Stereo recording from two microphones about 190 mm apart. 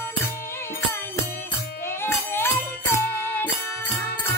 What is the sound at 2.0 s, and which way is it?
Music, 15° left (ahead or behind).